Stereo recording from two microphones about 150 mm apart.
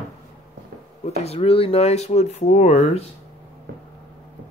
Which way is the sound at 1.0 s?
45° left (ahead or behind).